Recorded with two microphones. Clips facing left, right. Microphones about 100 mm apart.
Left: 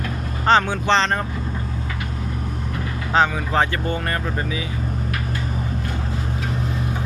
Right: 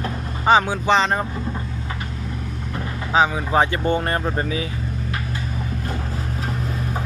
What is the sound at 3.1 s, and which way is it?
Speech, 10° right (ahead or behind).